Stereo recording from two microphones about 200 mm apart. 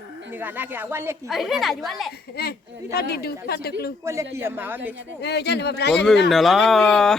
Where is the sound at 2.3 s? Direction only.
50° left (ahead or behind).